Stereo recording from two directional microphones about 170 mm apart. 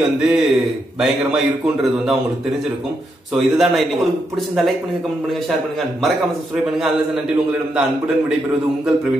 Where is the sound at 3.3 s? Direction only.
Centre (ahead or behind).